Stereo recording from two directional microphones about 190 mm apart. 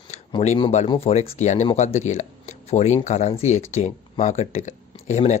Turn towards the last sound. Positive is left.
turn(degrees=40)  # may be behind; listen again after turning